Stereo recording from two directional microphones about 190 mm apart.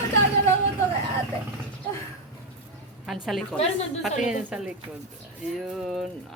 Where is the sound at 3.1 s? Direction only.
Centre (ahead or behind).